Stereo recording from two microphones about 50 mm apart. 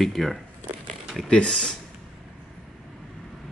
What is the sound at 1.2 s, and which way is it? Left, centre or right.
Speech, centre.